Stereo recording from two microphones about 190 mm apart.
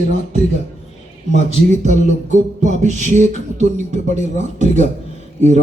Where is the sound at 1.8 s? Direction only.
40° right (ahead or behind).